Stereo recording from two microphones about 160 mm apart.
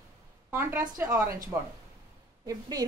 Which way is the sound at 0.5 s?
15° right (ahead or behind).